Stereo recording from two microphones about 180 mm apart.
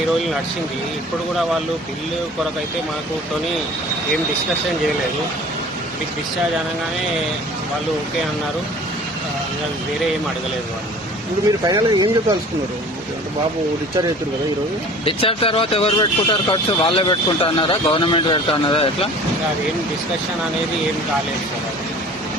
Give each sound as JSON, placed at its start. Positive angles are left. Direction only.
{"t": 11.6, "sound": "speech", "side_deg": -25}
{"t": 15.0, "sound": "speech", "side_deg": 30}